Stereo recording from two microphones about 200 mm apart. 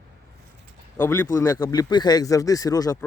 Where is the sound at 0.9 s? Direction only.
10° left (ahead or behind).